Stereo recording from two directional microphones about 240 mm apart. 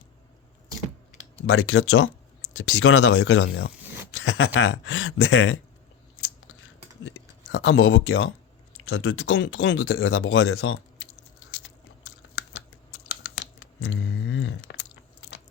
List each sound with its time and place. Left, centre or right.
1.5 s speech: left
6.2 s chewing: left
7.5 s speech: left
12.9 s scissors: left